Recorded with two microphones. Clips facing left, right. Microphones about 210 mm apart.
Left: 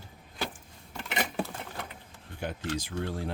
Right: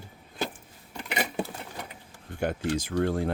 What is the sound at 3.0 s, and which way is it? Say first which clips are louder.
Speech: right 7 dB; 55° right (ahead or behind).